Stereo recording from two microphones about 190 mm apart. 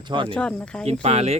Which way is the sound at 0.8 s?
35° right (ahead or behind).